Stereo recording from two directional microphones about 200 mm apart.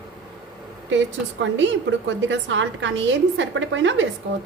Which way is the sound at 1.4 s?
70° right (ahead or behind).